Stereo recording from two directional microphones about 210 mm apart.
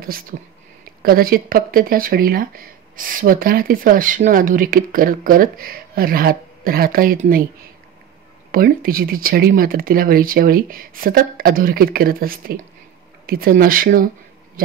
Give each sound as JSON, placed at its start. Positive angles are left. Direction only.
{"t": 0.0, "sound": "speech", "side_deg": -45}
{"t": 8.5, "sound": "speech", "side_deg": -45}